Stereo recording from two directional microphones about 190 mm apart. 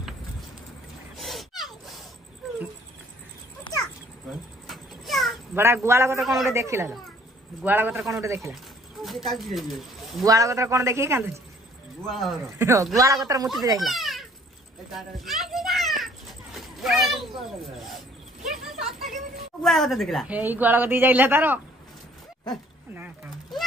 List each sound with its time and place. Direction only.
1.1 s a sound: centre (ahead or behind)
4.6 s cat: centre (ahead or behind)
5.6 s a woman's voice: 15° right (ahead or behind)
6.1 s a man's voice: centre (ahead or behind)
6.5 s a woman's voice: 15° right (ahead or behind)
9.0 s speech: centre (ahead or behind)
10.2 s a woman's voice: 15° right (ahead or behind)
12.1 s a man's voice: centre (ahead or behind)
12.5 s a woman's voice: 15° right (ahead or behind)
13.8 s a sound: centre (ahead or behind)
14.9 s children playing: centre (ahead or behind)
17.8 s cricket: centre (ahead or behind)
19.6 s a woman's voice: centre (ahead or behind)